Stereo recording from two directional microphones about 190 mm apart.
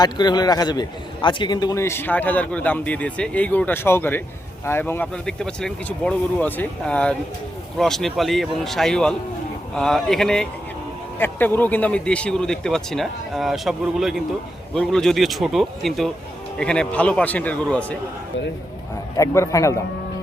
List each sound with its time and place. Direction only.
0.0 s a man's voice: 20° left (ahead or behind); by 17.9 s 5° left (ahead or behind)
19.1 s a man's voice: 15° left (ahead or behind)